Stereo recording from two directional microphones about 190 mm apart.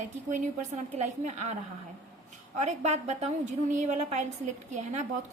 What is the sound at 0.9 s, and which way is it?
Speech, 35° right (ahead or behind).